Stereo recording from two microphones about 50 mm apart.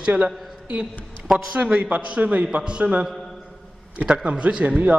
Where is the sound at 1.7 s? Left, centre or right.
Right.